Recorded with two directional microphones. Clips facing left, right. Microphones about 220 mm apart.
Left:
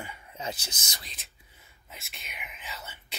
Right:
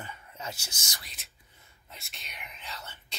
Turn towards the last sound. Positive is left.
turn(degrees=5)  # may be behind; listen again after turning